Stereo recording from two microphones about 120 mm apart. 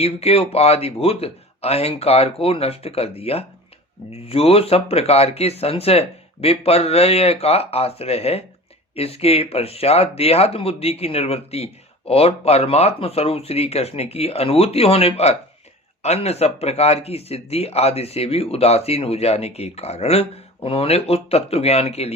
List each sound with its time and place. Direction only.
0.0 s speech: 55° left (ahead or behind)